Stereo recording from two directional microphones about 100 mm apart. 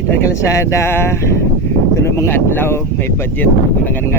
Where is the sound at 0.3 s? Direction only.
30° left (ahead or behind).